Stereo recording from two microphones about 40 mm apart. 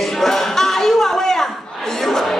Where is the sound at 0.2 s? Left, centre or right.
Centre.